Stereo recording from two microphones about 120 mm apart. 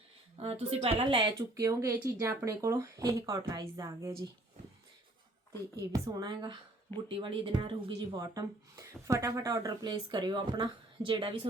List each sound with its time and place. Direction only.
0.3 s a woman's voice: 55° right (ahead or behind)
1.5 s speech: 25° right (ahead or behind)
5.9 s a woman's voice: 30° right (ahead or behind)
8.2 s speech: 30° right (ahead or behind); by 11.3 s 45° right (ahead or behind)